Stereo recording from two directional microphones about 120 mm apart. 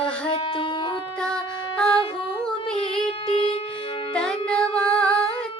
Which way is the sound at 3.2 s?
50° left (ahead or behind).